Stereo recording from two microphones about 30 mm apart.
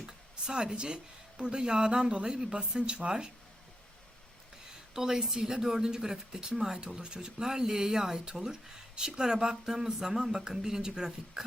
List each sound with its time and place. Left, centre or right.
0.4 s speech: right
4.9 s speech: right